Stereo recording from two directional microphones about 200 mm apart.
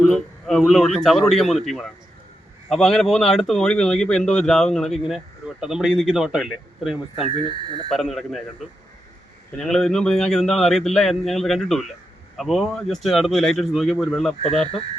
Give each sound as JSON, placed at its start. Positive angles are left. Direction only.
{"t": 0.1, "sound": "speech", "side_deg": 0}
{"t": 7.3, "sound": "speech", "side_deg": -25}
{"t": 7.9, "sound": "speech", "side_deg": 0}
{"t": 9.6, "sound": "speech", "side_deg": 5}